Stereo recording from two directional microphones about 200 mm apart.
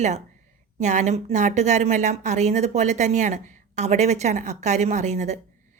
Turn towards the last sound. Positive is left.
turn(degrees=-35)  # may be behind; listen again after turning